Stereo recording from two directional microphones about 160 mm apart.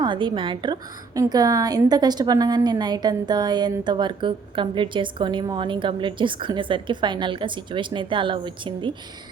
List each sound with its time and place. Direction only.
0.0 s a woman's voice: 30° right (ahead or behind)